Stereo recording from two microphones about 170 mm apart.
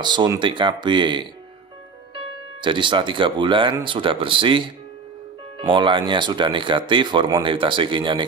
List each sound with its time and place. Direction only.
0.0 s speech: 25° right (ahead or behind)